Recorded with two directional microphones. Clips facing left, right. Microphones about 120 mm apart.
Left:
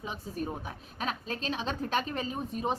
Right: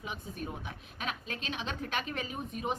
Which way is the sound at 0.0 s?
35° left (ahead or behind).